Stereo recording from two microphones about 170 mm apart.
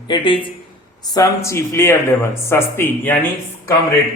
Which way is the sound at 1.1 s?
20° left (ahead or behind).